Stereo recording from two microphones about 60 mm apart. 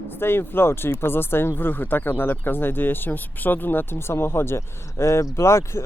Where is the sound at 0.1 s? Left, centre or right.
Left.